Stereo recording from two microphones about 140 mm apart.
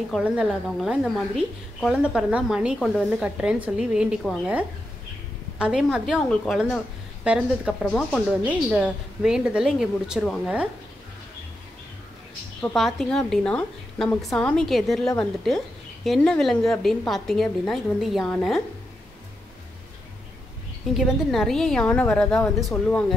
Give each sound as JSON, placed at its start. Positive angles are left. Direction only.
{"t": 0.1, "sound": "a woman's voice", "side_deg": 0}
{"t": 6.2, "sound": "speech", "side_deg": 5}
{"t": 7.2, "sound": "a woman's voice", "side_deg": -10}
{"t": 7.8, "sound": "speech", "side_deg": 10}
{"t": 8.5, "sound": "a woman's voice", "side_deg": -10}
{"t": 12.7, "sound": "a woman's voice", "side_deg": 0}
{"t": 20.9, "sound": "a woman's voice", "side_deg": 0}